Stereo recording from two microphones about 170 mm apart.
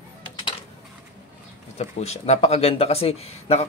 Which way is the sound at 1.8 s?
40° left (ahead or behind).